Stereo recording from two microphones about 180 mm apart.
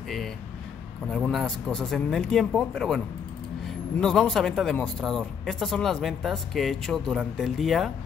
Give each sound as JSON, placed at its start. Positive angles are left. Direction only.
{"t": 1.0, "sound": "speech", "side_deg": 5}